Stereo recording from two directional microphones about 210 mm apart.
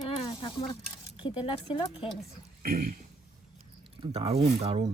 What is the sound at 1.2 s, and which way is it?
Speech, 25° left (ahead or behind).